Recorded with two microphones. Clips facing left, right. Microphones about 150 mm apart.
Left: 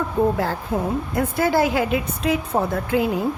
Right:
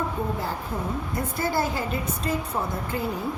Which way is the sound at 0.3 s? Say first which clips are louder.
Left 7 dB; 80° left.